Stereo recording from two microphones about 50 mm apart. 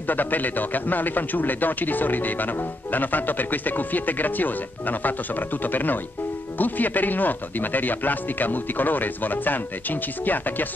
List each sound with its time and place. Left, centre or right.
0.1 s speech: left